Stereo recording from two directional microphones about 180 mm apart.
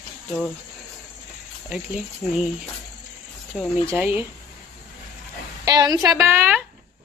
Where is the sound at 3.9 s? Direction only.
10° right (ahead or behind).